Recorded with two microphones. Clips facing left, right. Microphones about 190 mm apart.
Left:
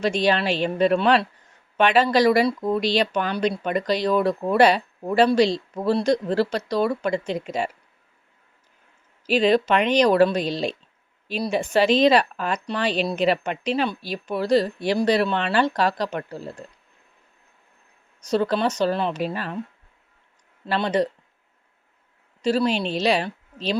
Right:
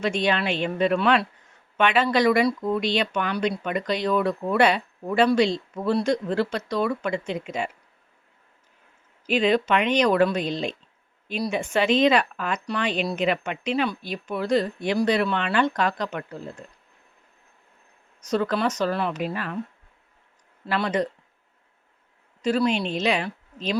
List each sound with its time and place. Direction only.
0.0 s speech: 35° left (ahead or behind)
9.2 s speech: 35° left (ahead or behind)
18.3 s speech: 30° left (ahead or behind)
20.7 s speech: 30° left (ahead or behind)
22.4 s a woman's voice: 30° left (ahead or behind)